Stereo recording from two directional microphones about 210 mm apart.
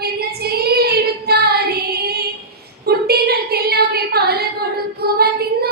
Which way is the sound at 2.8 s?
50° right (ahead or behind).